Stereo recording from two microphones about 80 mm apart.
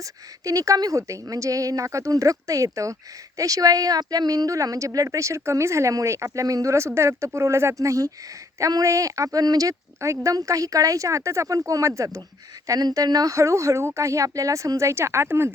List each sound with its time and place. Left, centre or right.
0.0 s speech: right